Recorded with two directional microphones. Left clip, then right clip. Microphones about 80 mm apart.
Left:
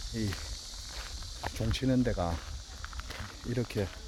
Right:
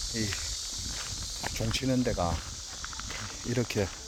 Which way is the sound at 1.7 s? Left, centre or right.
Left.